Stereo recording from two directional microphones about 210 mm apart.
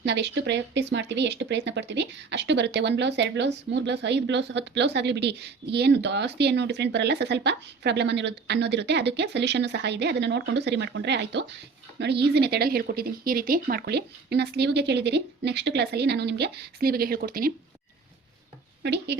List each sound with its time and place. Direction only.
0.0 s speech: 55° right (ahead or behind)
18.8 s speech: 55° right (ahead or behind)